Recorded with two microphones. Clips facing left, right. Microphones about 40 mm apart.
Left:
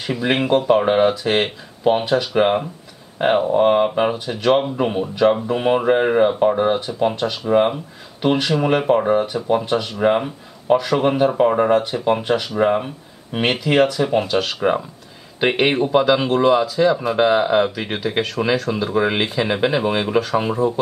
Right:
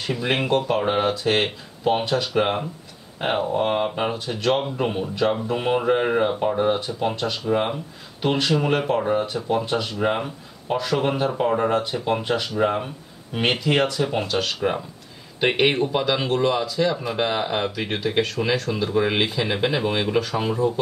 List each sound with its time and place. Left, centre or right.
0.0 s speech: centre
6.8 s speech: centre
11.8 s speech: centre